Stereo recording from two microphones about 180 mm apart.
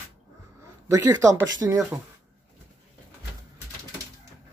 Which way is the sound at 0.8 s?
20° right (ahead or behind).